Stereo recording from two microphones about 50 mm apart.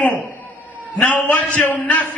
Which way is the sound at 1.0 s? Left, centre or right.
Left.